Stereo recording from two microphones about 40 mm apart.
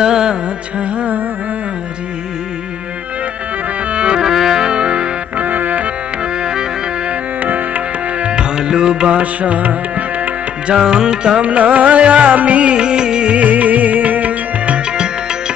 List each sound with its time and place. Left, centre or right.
0.0 s music: centre
0.7 s music: right
3.9 s music: right
4.2 s music: centre
5.4 s music: right
7.4 s music: right
8.3 s music: right
9.2 s music: right
10.7 s music: centre
11.3 s music: right
13.4 s music: right
14.9 s music: centre